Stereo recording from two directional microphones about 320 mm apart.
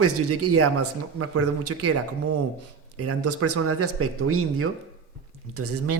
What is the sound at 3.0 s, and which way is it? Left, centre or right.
Speech, right.